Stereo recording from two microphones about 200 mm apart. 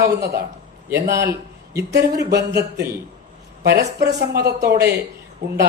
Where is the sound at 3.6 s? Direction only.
55° right (ahead or behind).